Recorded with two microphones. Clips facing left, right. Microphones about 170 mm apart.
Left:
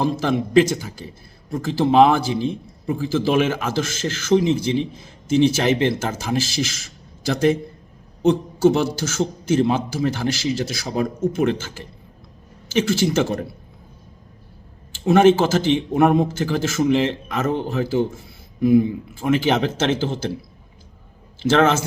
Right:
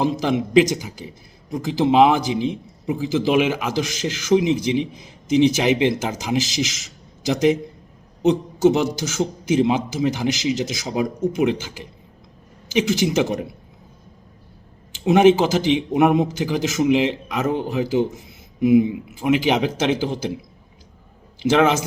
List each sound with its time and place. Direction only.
0.0 s a man's voice: 15° right (ahead or behind)
14.9 s a man's voice: 15° right (ahead or behind)